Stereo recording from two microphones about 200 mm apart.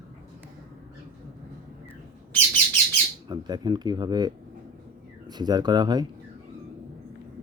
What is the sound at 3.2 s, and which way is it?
Speech, 20° right (ahead or behind).